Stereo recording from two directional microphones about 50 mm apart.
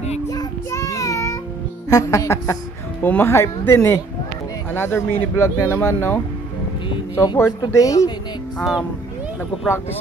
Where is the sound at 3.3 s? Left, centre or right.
Left.